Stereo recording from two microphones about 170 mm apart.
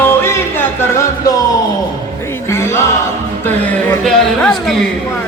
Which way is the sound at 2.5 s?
15° left (ahead or behind).